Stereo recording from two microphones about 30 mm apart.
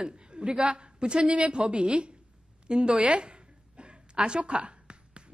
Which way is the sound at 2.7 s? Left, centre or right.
Right.